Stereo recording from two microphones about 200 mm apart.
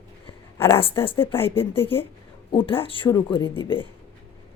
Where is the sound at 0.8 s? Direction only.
25° left (ahead or behind).